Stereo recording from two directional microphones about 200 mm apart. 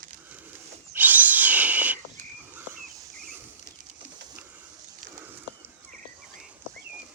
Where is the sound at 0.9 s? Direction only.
10° right (ahead or behind).